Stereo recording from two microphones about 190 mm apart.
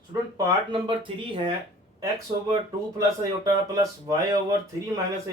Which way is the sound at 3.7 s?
20° right (ahead or behind).